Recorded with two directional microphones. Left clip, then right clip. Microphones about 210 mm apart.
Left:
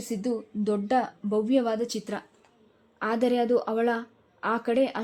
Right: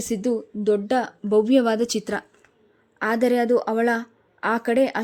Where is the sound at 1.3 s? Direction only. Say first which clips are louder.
Right 8 dB; 20° right (ahead or behind).